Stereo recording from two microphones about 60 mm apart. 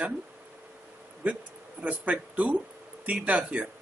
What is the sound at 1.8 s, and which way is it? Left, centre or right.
A man's voice, right.